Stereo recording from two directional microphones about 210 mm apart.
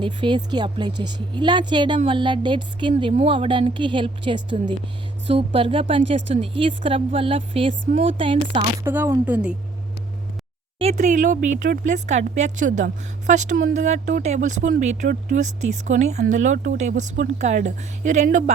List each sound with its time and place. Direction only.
0.0 s speech: 20° right (ahead or behind)
8.8 s speech: 10° right (ahead or behind)
10.8 s speech: 30° right (ahead or behind)